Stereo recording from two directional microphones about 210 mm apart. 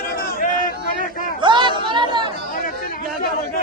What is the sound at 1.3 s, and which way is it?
Chatter, 20° right (ahead or behind).